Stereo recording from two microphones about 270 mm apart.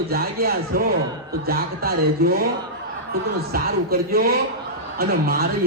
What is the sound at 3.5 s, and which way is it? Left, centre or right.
Speech, right.